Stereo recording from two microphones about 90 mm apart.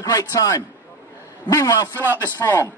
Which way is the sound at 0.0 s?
40° left (ahead or behind).